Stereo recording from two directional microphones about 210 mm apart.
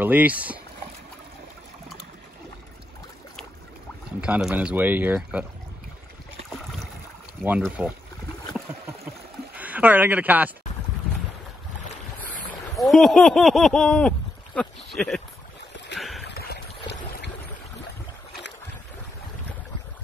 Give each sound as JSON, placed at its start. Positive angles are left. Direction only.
{"t": 0.0, "sound": "speech", "side_deg": -5}
{"t": 4.2, "sound": "speech", "side_deg": -5}
{"t": 6.5, "sound": "boat", "side_deg": 0}
{"t": 7.6, "sound": "speech", "side_deg": -5}
{"t": 9.6, "sound": "speech", "side_deg": -5}
{"t": 12.7, "sound": "speech", "side_deg": 0}
{"t": 16.0, "sound": "a sound", "side_deg": 0}
{"t": 16.3, "sound": "boat", "side_deg": 50}